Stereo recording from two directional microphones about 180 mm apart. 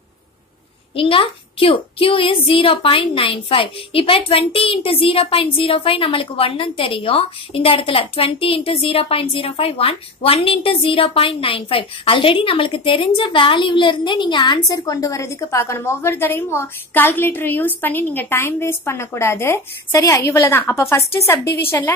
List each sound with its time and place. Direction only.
0.9 s a child's voice: 30° left (ahead or behind); by 21.9 s 15° left (ahead or behind)